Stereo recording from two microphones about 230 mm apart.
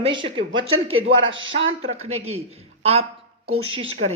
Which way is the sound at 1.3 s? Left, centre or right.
Right.